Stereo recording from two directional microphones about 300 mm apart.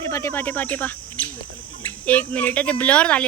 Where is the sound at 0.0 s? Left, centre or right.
Centre.